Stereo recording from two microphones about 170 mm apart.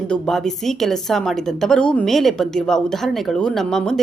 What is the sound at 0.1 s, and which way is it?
A woman's voice, centre (ahead or behind).